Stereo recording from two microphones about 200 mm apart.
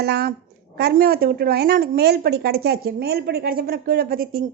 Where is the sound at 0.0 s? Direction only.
55° right (ahead or behind).